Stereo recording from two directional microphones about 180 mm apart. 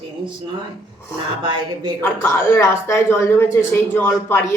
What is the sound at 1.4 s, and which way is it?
Speech, 25° right (ahead or behind).